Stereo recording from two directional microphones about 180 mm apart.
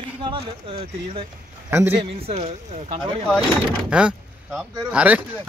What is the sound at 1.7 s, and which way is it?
Speech, 10° right (ahead or behind).